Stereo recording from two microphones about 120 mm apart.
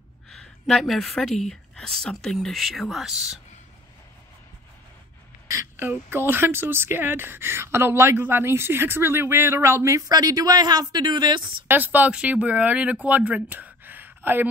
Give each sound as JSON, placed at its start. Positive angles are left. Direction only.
{"t": 0.3, "sound": "speech", "side_deg": 5}
{"t": 5.5, "sound": "a sound", "side_deg": -25}
{"t": 5.9, "sound": "speech", "side_deg": -20}
{"t": 11.4, "sound": "speech", "side_deg": -15}